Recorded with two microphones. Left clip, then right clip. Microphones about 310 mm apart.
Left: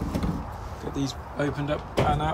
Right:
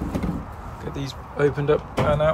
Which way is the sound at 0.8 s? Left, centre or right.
Centre.